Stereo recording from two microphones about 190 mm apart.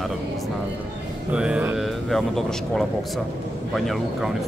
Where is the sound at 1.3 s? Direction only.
5° right (ahead or behind).